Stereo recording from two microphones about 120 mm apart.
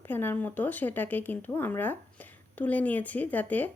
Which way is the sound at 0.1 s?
15° left (ahead or behind).